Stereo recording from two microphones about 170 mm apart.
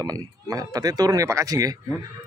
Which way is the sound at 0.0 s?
20° right (ahead or behind).